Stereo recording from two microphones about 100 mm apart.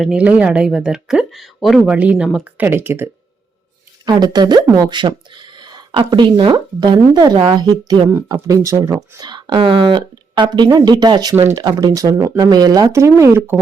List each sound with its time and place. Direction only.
0.0 s speech: 10° right (ahead or behind)
4.0 s speech: 45° right (ahead or behind)
9.6 s speech: 55° right (ahead or behind)
11.3 s speech: 25° right (ahead or behind)
11.6 s speech: 40° right (ahead or behind)
12.1 s speech: 25° right (ahead or behind)
12.4 s speech: 40° right (ahead or behind)